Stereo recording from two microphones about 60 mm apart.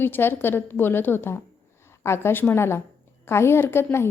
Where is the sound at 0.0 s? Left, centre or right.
Left.